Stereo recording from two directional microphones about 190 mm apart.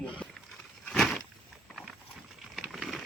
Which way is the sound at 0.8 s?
Centre (ahead or behind).